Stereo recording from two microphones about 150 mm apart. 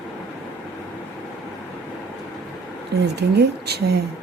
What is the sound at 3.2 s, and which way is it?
Speech, 90° right.